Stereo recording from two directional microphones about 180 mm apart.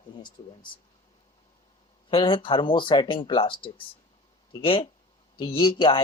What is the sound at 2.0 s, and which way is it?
Speech, 30° left (ahead or behind).